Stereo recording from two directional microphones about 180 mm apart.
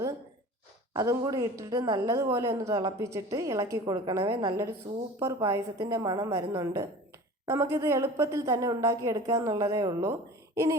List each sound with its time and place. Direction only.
0.9 s a woman's voice: 15° right (ahead or behind)